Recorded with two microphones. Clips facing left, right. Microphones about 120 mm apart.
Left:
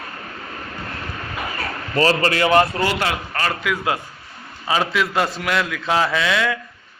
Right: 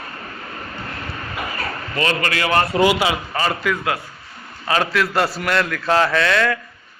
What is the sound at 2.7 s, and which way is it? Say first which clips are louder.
A man's voice: right 5 dB; 10° right (ahead or behind).